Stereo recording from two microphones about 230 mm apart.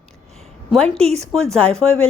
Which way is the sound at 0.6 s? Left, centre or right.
Centre.